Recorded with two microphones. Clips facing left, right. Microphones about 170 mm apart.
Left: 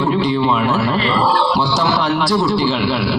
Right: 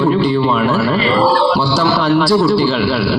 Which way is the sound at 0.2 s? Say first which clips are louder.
Right 2 dB; 15° left (ahead or behind).